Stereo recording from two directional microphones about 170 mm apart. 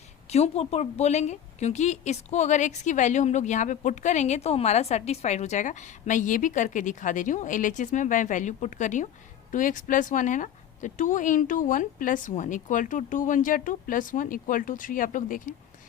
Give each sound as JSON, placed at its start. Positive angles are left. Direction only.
{"t": 0.3, "sound": "a woman's voice", "side_deg": 40}